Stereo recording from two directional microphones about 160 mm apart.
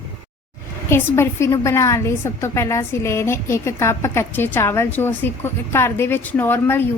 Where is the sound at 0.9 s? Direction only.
15° left (ahead or behind).